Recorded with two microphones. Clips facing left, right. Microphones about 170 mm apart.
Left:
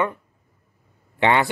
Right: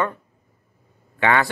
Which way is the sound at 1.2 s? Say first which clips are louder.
Left 1 dB; 20° left (ahead or behind).